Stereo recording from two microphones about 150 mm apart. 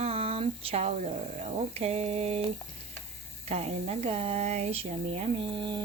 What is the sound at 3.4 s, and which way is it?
Speech, 45° right (ahead or behind).